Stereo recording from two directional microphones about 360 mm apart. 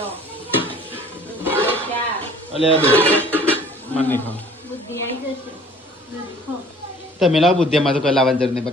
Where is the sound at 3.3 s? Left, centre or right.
Centre.